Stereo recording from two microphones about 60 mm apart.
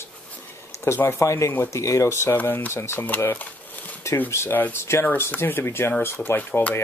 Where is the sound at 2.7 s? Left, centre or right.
Left.